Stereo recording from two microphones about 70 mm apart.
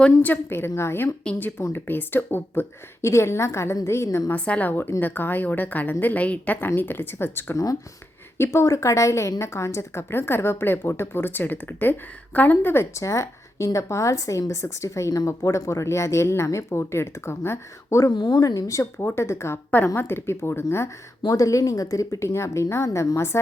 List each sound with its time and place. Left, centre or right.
0.2 s a woman's voice: left
0.8 s a woman's voice: left
4.4 s a woman's voice: centre
4.7 s a woman's voice: left
7.5 s speech: left
8.5 s speech: left
18.1 s speech: left
21.2 s speech: left
22.2 s speech: left